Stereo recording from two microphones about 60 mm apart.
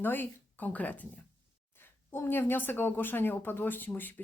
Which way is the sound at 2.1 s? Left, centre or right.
Left.